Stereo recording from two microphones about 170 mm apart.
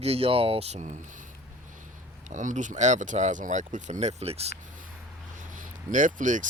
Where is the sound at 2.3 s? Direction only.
45° right (ahead or behind).